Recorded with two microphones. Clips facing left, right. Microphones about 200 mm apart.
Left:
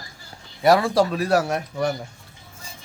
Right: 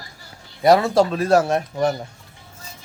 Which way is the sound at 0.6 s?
20° right (ahead or behind).